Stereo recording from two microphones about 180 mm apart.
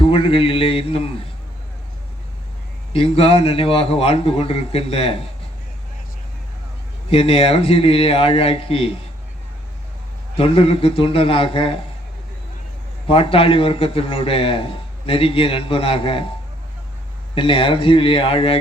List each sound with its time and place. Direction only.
0.0 s a man's voice: 30° left (ahead or behind)
2.9 s a man's voice: 30° left (ahead or behind)
7.1 s a man's voice: 30° left (ahead or behind)
10.3 s a man's voice: 30° left (ahead or behind)
13.1 s a man's voice: 30° left (ahead or behind)
17.3 s speech: 30° left (ahead or behind)